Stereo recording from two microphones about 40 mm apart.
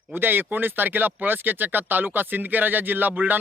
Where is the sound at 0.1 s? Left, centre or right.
Right.